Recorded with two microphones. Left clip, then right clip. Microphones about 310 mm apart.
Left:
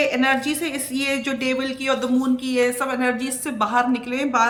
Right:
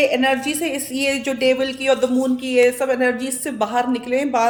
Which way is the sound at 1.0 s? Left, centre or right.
Centre.